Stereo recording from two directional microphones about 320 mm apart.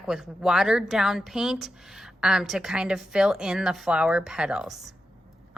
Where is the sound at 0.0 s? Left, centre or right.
Centre.